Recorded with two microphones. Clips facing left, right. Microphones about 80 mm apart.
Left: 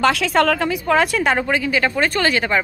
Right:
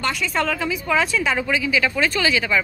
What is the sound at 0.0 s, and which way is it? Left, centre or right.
A woman's voice, left.